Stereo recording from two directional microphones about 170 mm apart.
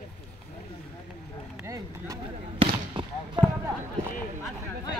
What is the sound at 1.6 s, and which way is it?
Vehicle, 20° right (ahead or behind).